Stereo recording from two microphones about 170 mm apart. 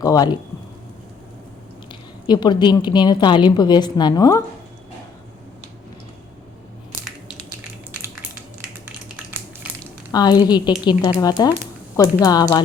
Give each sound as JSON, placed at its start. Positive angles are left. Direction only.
{"t": 0.0, "sound": "a woman's voice", "side_deg": 20}
{"t": 1.9, "sound": "a woman's voice", "side_deg": 25}
{"t": 10.1, "sound": "a woman's voice", "side_deg": 25}